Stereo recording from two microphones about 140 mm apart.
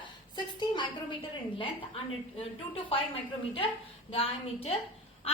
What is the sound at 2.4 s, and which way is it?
Speech, 40° left (ahead or behind).